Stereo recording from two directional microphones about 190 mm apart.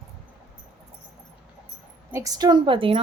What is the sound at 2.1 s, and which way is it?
Speech, 20° right (ahead or behind).